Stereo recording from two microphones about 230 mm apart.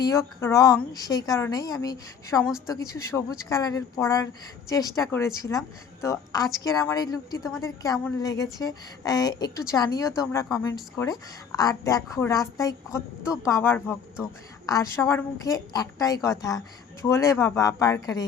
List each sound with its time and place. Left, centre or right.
0.0 s a woman's voice: centre